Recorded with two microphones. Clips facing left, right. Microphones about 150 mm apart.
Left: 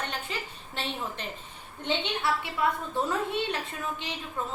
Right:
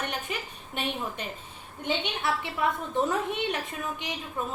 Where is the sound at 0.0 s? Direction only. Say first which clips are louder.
Right 1 dB; 15° right (ahead or behind).